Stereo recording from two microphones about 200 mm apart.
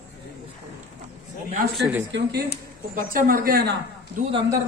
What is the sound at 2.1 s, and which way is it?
Speech, 60° right (ahead or behind).